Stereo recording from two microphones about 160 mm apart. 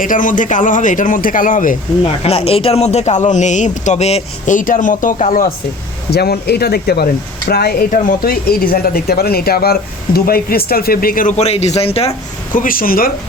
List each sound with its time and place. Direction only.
0.0 s a man's voice: 55° left (ahead or behind)
2.0 s speech: 40° left (ahead or behind)
6.1 s speech: 85° left; by 12.1 s 40° left (ahead or behind)
12.5 s a man's voice: 60° left (ahead or behind)